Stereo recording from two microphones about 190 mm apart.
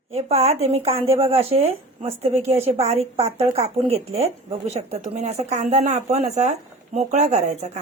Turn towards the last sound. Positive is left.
turn(degrees=-40)  # may be behind; listen again after turning